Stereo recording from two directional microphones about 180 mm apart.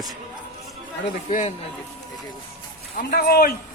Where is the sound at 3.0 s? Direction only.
60° left (ahead or behind).